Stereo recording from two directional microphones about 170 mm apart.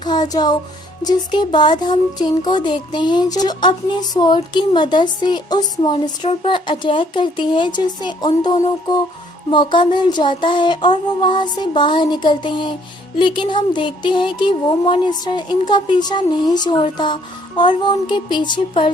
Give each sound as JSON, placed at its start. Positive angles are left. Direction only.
{"t": 0.0, "sound": "music", "side_deg": 25}
{"t": 1.0, "sound": "speech", "side_deg": 25}
{"t": 17.8, "sound": "speech", "side_deg": 25}